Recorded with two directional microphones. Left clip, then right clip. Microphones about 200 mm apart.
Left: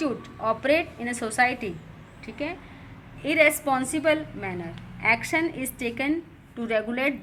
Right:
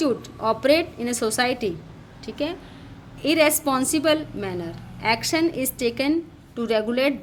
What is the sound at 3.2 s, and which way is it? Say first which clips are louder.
A woman's voice: right 1 dB; 35° right (ahead or behind).